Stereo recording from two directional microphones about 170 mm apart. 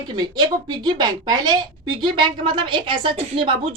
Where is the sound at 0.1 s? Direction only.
25° right (ahead or behind).